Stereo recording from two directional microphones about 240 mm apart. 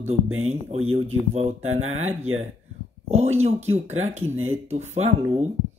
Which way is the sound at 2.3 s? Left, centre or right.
Right.